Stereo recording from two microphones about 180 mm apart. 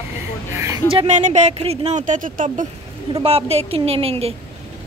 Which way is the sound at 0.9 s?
40° right (ahead or behind).